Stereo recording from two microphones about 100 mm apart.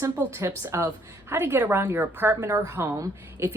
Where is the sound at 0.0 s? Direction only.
25° right (ahead or behind).